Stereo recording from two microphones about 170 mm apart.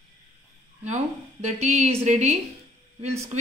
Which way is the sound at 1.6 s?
40° right (ahead or behind).